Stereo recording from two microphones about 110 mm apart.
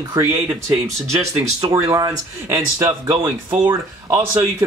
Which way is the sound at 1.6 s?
30° right (ahead or behind).